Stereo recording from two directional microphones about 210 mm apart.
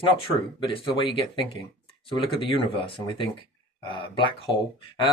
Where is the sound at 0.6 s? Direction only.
25° left (ahead or behind).